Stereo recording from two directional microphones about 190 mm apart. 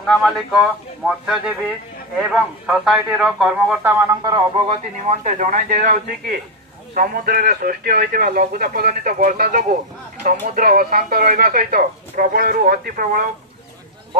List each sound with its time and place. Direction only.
0.0 s speech: centre (ahead or behind)
2.6 s a man's voice: 5° right (ahead or behind); by 13.3 s 50° right (ahead or behind)